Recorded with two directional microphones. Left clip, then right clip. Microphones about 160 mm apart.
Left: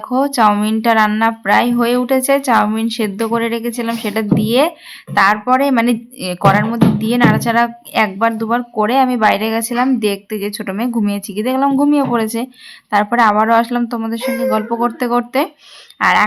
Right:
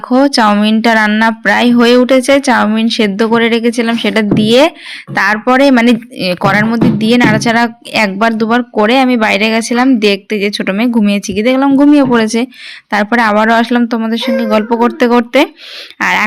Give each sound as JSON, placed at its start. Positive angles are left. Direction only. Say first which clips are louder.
{"t": 0.1, "sound": "speech", "louder": "right 4 dB", "side_deg": -20}